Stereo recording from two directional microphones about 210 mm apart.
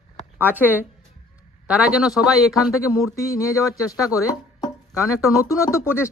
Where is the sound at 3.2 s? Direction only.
15° left (ahead or behind).